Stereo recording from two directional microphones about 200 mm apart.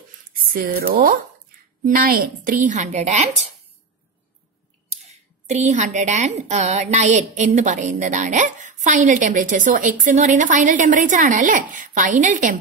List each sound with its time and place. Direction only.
0.5 s speech: 45° right (ahead or behind)
4.8 s speech: 35° right (ahead or behind)